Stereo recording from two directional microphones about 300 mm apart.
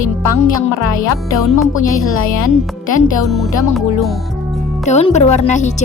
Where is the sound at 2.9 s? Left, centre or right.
Left.